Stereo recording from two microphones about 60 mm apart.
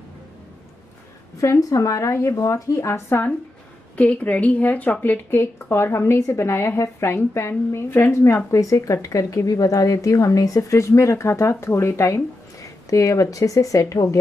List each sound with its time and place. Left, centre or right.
1.4 s speech: left
3.9 s a woman's voice: left
8.5 s speech: left